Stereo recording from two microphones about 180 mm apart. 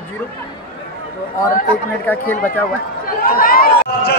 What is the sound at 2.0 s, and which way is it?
Speech, 10° left (ahead or behind).